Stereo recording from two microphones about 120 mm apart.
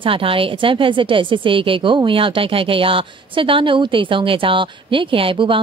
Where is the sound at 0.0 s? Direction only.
50° right (ahead or behind).